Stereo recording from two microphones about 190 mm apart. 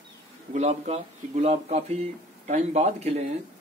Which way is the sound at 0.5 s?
35° right (ahead or behind).